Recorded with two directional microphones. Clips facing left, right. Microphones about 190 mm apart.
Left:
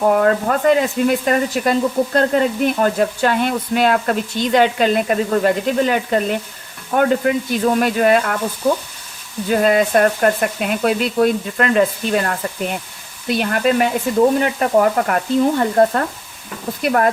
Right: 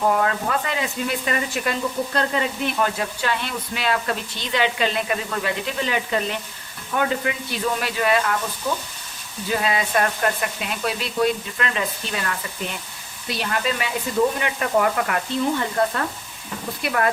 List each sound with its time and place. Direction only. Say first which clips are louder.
0.1 s speech: left 7 dB; 50° left (ahead or behind)
9.5 s speech: left 8 dB; 50° left (ahead or behind)
14.3 s frying: left 7 dB; 40° left (ahead or behind)
16.8 s speech: left 7 dB; 45° left (ahead or behind)